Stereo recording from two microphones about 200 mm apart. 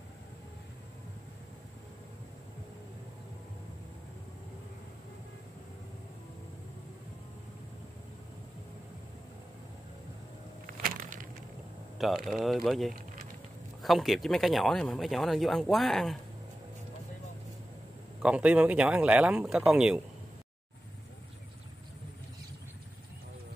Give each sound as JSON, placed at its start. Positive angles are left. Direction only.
{"t": 10.8, "sound": "a sound", "side_deg": -40}
{"t": 12.3, "sound": "speech", "side_deg": 0}
{"t": 18.2, "sound": "speech", "side_deg": -5}